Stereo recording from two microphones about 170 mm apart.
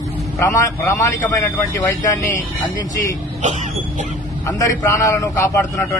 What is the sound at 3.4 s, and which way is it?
Speech, 45° right (ahead or behind).